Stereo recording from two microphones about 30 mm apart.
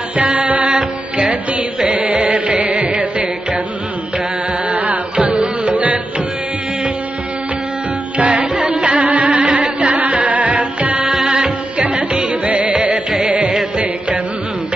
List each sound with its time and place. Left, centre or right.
0.1 s music: right
0.7 s music: right
2.0 s music: right
2.5 s music: right
4.6 s carnatic music: right
5.7 s music: right
8.2 s music: right
12.1 s music: right